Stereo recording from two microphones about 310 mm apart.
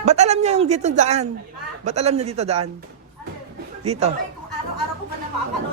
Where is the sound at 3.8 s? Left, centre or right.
Right.